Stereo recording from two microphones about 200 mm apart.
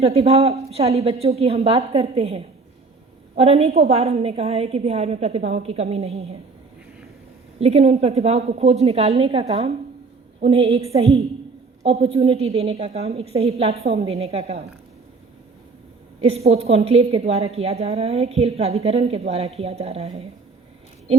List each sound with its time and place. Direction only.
0.0 s a woman's voice: 30° right (ahead or behind)
7.6 s a woman's voice: 30° right (ahead or behind)
16.2 s a woman's voice: 30° right (ahead or behind)